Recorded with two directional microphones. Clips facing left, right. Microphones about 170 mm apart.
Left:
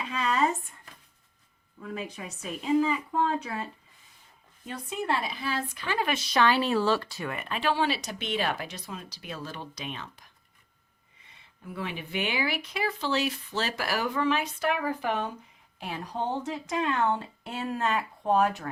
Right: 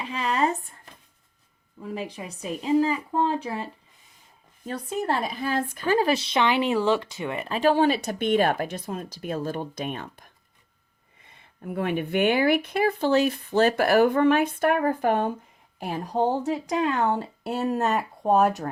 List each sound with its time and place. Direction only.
1.8 s speech: 30° right (ahead or behind); by 6.1 s 45° right (ahead or behind)
6.1 s speech: 30° right (ahead or behind); by 10.3 s 50° right (ahead or behind)
11.3 s speech: 50° right (ahead or behind)